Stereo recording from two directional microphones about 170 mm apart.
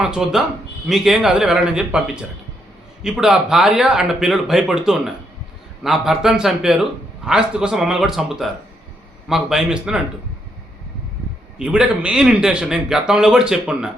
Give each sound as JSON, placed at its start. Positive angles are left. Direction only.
{"t": 0.0, "sound": "speech", "side_deg": -5}
{"t": 3.0, "sound": "speech", "side_deg": -5}
{"t": 11.6, "sound": "speech", "side_deg": -5}